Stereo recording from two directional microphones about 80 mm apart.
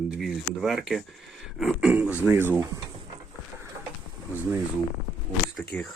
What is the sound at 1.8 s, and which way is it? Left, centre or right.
Speech, centre.